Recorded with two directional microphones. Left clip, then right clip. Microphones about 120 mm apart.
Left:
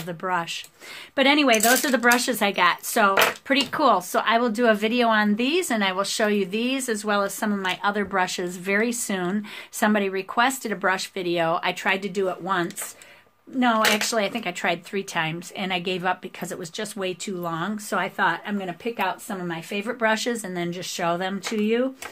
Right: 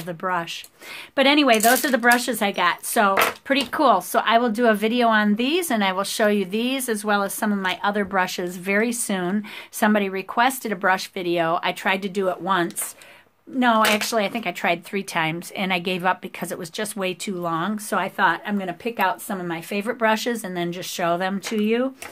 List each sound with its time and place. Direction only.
0.2 s speech: 35° right (ahead or behind); by 13.8 s 60° right (ahead or behind)
13.9 s speech: 40° right (ahead or behind); by 20.0 s 65° right (ahead or behind)
20.0 s speech: 45° right (ahead or behind)